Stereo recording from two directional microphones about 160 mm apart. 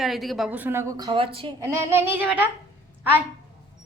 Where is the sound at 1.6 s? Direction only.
15° right (ahead or behind).